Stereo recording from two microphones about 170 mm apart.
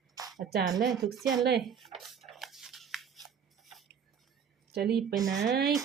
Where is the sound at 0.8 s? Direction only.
Centre (ahead or behind).